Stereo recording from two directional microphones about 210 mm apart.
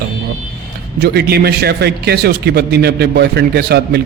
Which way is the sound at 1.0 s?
50° right (ahead or behind).